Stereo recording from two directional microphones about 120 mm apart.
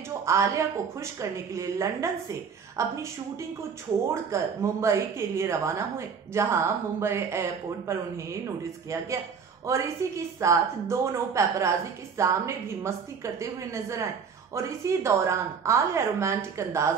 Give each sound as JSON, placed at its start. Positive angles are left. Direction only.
{"t": 0.2, "sound": "a woman's voice", "side_deg": -25}
{"t": 9.7, "sound": "a woman's voice", "side_deg": -25}